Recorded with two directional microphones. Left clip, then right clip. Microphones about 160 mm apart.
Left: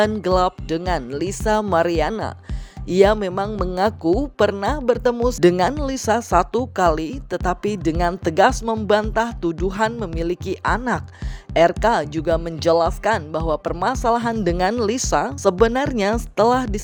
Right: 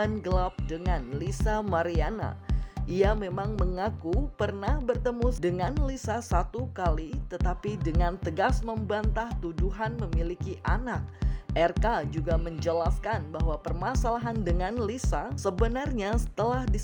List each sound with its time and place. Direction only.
0.2 s speech: 35° left (ahead or behind)
13.7 s speech: 30° left (ahead or behind)